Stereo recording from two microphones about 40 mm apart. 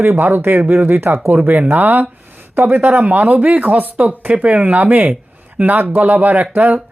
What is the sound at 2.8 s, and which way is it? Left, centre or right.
Speech, right.